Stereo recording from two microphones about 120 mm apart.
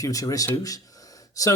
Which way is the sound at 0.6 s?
30° left (ahead or behind).